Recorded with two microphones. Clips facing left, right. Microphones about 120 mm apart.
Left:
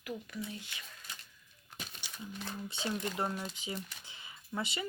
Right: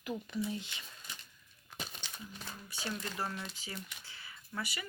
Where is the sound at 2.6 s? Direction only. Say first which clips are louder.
Left 4 dB; 20° left (ahead or behind).